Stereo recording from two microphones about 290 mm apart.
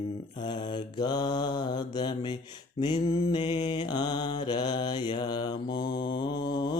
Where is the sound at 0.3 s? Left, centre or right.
Centre.